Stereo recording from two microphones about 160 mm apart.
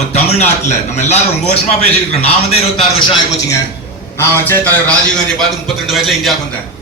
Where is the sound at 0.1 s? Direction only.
45° left (ahead or behind).